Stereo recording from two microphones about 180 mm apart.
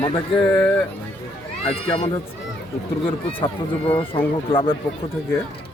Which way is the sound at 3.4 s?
30° left (ahead or behind).